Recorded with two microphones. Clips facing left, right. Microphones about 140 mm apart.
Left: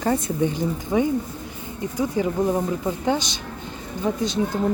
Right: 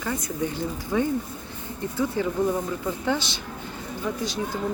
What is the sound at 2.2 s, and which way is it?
Speech, 15° left (ahead or behind).